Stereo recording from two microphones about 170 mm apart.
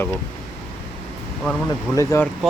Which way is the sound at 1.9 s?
15° left (ahead or behind).